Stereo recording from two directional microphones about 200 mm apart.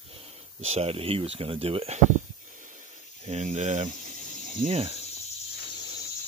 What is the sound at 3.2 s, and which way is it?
Speech, 35° right (ahead or behind).